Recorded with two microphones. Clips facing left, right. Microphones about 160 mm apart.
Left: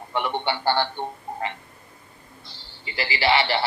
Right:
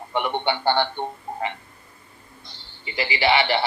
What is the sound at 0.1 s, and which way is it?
Speech, 20° right (ahead or behind).